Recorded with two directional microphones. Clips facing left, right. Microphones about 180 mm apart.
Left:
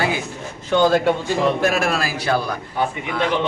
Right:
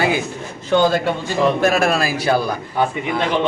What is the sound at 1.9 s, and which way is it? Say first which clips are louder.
Speech: right 4 dB; 20° right (ahead or behind).